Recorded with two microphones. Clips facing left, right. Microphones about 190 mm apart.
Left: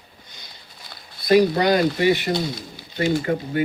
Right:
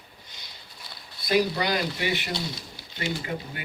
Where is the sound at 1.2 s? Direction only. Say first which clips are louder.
Left 8 dB; 50° left (ahead or behind).